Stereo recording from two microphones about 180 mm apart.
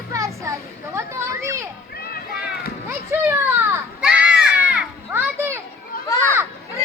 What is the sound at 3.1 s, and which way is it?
Children playing, 15° right (ahead or behind).